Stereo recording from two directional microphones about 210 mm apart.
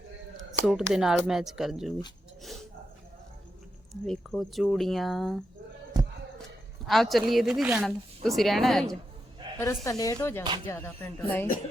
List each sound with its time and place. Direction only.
0.6 s speech: centre (ahead or behind)
2.4 s a sound: centre (ahead or behind)
4.0 s speech: centre (ahead or behind)
6.8 s speech: centre (ahead or behind)
9.6 s speech: 15° left (ahead or behind)